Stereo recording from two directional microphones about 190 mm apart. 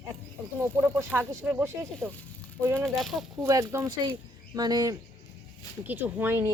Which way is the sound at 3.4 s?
15° right (ahead or behind).